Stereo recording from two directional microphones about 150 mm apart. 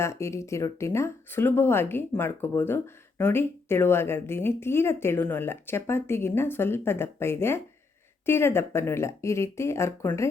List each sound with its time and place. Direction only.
0.0 s speech: 20° left (ahead or behind)